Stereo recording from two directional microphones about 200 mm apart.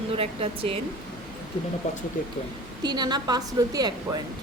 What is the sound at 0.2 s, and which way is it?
Speech, 30° right (ahead or behind).